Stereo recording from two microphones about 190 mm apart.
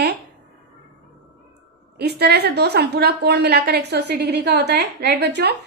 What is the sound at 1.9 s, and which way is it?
A woman's voice, 60° right (ahead or behind).